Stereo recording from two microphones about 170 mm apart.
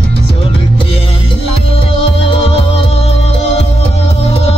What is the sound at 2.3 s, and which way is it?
Music, 35° left (ahead or behind).